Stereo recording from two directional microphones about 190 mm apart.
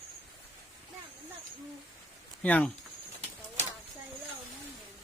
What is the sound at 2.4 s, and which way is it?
Speech, 5° left (ahead or behind).